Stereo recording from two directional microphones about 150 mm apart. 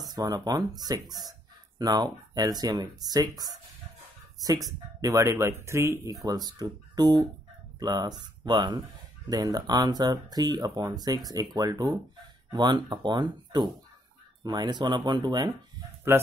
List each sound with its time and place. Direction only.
0.0 s speech: 25° right (ahead or behind)
16.1 s speech: 15° right (ahead or behind)